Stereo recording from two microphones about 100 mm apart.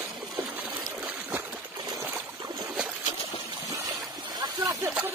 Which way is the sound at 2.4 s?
40° right (ahead or behind).